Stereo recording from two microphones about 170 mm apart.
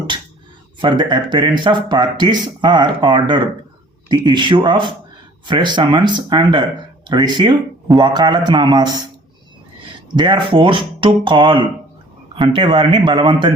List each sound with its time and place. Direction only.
0.8 s speech: 25° right (ahead or behind)